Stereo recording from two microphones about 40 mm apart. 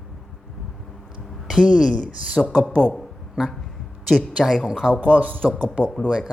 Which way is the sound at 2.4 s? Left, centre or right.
Centre.